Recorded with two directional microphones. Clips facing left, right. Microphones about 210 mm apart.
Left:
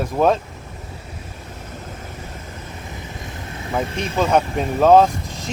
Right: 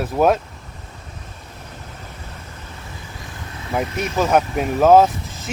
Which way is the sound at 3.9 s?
30° left (ahead or behind).